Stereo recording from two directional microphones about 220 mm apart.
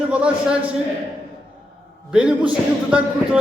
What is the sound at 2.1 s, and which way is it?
A man's voice, 5° right (ahead or behind).